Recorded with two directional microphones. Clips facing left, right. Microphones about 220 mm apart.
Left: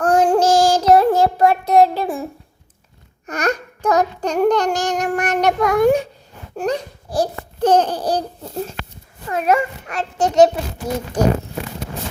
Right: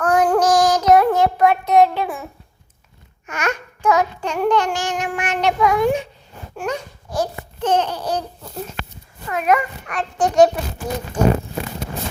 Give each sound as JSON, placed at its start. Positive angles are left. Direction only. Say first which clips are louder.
{"t": 0.0, "sound": "child singing", "louder": "left 2 dB", "side_deg": 30}
{"t": 6.6, "sound": "babbling", "louder": "left 4 dB", "side_deg": 35}
{"t": 9.3, "sound": "a child's voice", "louder": "left 1 dB", "side_deg": 30}
{"t": 11.2, "sound": "speech", "louder": "even", "side_deg": 35}